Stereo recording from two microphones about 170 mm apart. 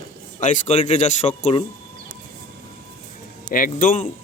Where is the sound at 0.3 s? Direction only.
45° left (ahead or behind).